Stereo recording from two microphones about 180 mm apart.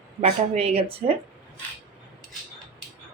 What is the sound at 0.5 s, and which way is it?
Speech, 35° right (ahead or behind).